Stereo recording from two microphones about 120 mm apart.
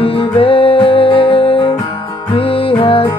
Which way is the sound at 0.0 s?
50° left (ahead or behind).